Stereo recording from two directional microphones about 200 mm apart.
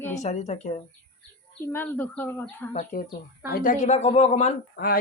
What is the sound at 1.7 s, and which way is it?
Speech, 10° left (ahead or behind).